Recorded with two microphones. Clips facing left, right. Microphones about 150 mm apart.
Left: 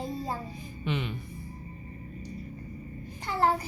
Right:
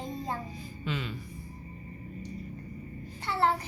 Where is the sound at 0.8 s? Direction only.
20° left (ahead or behind).